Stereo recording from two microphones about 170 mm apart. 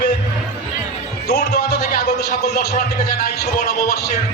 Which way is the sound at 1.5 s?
70° left (ahead or behind).